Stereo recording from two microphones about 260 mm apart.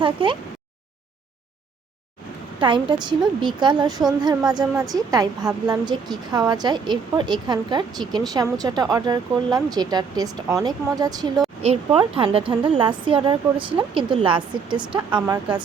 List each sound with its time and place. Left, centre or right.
0.0 s speech: centre
2.6 s a woman's voice: centre